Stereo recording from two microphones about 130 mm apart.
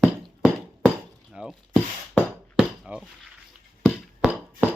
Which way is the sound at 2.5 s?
5° right (ahead or behind).